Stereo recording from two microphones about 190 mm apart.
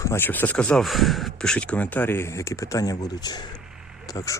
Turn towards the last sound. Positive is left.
turn(degrees=15)  # may be behind; listen again after turning